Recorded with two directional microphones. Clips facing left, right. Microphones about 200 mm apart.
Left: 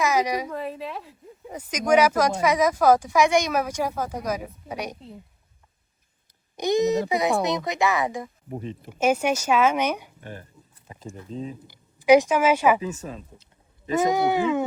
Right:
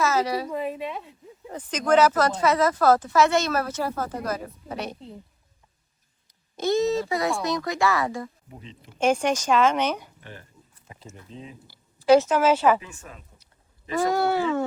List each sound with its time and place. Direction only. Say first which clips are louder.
0.0 s a woman's voice: left 1 dB; 15° left (ahead or behind)
0.5 s speech: right 2 dB; centre (ahead or behind)
6.6 s speech: left 1 dB; 15° left (ahead or behind)
8.4 s speech: left 11 dB; 50° left (ahead or behind)
8.9 s speech: even; 5° left (ahead or behind)
10.2 s speech: left 5 dB; 45° left (ahead or behind)
11.7 s a woman's voice: left 1 dB; 15° left (ahead or behind)
12.8 s speech: left 12 dB; 40° left (ahead or behind)
13.9 s speech: left 1 dB; 20° left (ahead or behind)